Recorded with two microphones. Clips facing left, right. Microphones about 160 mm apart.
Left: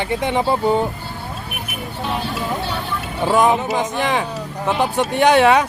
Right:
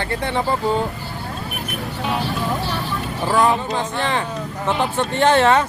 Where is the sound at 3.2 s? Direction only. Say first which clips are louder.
Left 2 dB; 20° left (ahead or behind).